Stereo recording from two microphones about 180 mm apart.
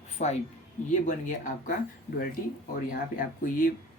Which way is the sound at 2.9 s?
50° left (ahead or behind).